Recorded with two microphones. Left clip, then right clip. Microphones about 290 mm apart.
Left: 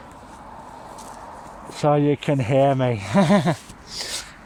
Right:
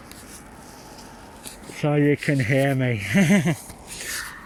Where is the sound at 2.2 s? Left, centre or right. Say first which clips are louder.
Left 3 dB; left.